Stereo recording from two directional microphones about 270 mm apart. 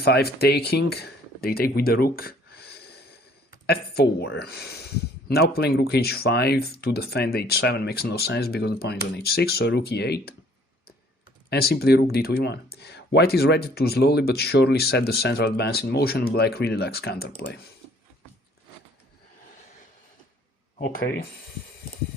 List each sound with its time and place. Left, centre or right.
0.0 s speech: left
11.4 s speech: left
20.7 s speech: left